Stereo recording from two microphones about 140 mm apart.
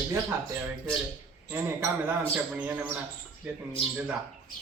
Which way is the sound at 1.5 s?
15° right (ahead or behind).